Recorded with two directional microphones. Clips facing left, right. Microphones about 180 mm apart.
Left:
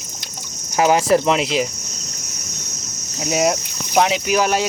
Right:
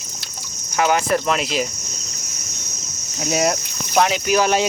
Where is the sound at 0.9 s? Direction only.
25° left (ahead or behind).